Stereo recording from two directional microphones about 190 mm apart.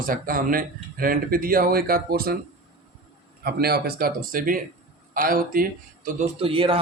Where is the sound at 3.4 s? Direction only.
55° right (ahead or behind).